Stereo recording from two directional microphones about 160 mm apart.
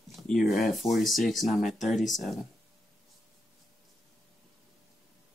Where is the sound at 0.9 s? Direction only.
Centre (ahead or behind).